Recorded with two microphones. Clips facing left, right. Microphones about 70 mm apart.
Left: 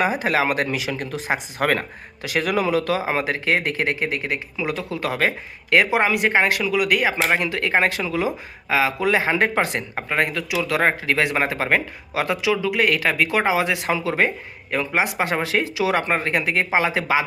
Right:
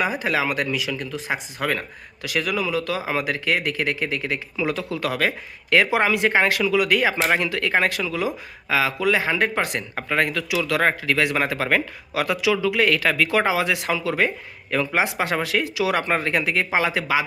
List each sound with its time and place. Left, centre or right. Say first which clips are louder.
0.3 s speech: left 2 dB; left
3.0 s speech: left 2 dB; left; by 4.8 s centre
4.9 s speech: left 4 dB; left
9.9 s speech: even; centre
12.6 s speech: even; centre; by 16.0 s left
16.0 s speech: left 1 dB; centre; by 17.2 s left